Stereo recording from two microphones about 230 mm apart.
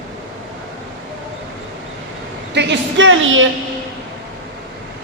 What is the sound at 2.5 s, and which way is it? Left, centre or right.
Speech, right.